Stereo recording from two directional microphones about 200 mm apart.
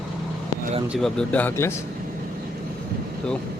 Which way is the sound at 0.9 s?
5° left (ahead or behind).